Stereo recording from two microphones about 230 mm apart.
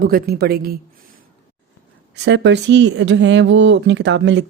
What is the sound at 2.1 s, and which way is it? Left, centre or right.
Speech, right.